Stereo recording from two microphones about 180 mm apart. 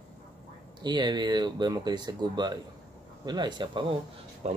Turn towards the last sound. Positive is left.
turn(degrees=-35)  # may be behind; listen again after turning